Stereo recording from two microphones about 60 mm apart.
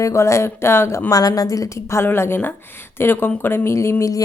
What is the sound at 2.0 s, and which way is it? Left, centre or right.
Speech, left.